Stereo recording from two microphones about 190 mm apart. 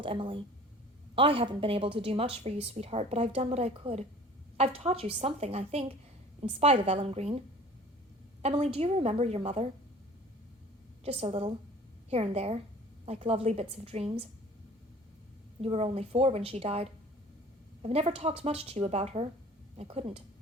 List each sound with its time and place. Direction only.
0.0 s a woman's voice: 25° right (ahead or behind)
11.0 s a woman's voice: 30° right (ahead or behind)
15.6 s a woman's voice: 35° right (ahead or behind)